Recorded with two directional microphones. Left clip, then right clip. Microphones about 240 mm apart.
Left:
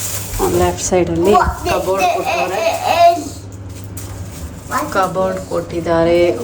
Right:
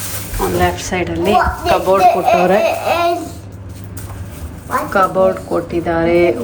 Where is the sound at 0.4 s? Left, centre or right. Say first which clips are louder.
Even; centre.